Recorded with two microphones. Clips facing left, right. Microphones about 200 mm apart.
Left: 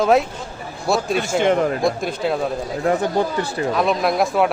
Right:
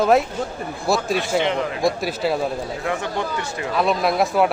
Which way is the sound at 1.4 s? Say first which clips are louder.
Left 5 dB; 45° left (ahead or behind).